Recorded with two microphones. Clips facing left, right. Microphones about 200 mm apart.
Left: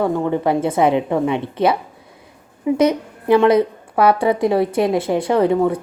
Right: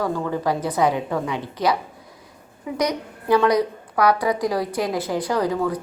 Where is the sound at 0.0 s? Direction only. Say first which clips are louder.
Left 5 dB; 25° left (ahead or behind).